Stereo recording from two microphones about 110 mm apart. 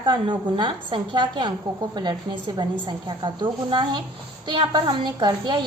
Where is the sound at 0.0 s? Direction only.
45° right (ahead or behind).